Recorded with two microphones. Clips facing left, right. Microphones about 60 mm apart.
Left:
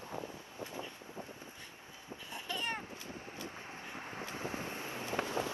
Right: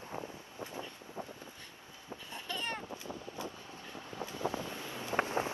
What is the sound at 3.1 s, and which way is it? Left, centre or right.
Vehicle, left.